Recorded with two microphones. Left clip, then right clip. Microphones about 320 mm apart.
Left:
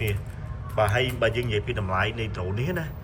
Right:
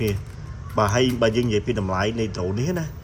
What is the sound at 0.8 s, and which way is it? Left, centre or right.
A man's voice, centre.